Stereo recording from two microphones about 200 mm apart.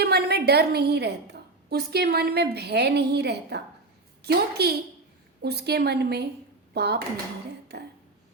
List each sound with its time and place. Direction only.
0.0 s a woman's voice: 55° right (ahead or behind)